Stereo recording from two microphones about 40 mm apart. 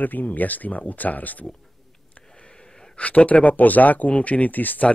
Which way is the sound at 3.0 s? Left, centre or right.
Left.